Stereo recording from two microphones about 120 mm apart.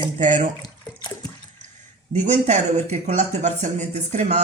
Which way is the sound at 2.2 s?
75° right (ahead or behind).